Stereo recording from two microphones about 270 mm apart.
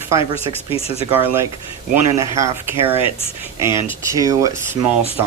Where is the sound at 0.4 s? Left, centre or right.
Left.